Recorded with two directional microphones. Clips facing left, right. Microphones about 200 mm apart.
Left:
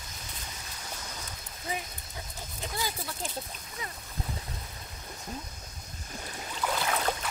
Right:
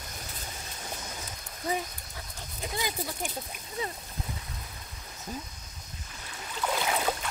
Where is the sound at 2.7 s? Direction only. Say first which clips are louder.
Right 3 dB; 15° right (ahead or behind).